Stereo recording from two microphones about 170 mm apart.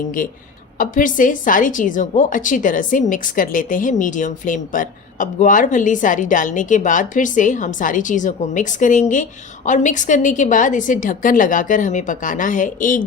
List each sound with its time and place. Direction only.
0.8 s a woman's voice: 50° left (ahead or behind)